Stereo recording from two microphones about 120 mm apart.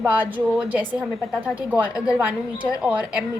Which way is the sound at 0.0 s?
15° right (ahead or behind).